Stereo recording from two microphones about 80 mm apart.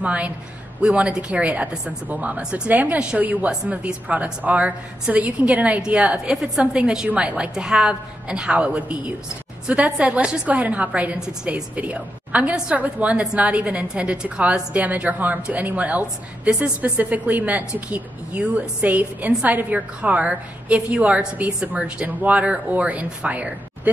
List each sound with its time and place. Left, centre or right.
0.0 s a woman's voice: centre